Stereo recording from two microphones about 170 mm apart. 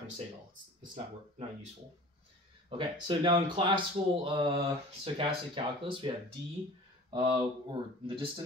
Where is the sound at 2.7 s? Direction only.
30° right (ahead or behind).